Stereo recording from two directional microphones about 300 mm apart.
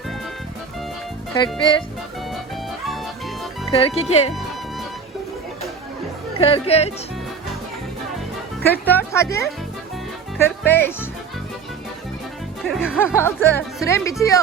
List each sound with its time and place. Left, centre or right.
1.5 s speech: centre
3.7 s speech: centre
6.4 s speech: centre
8.6 s speech: centre
12.6 s speech: centre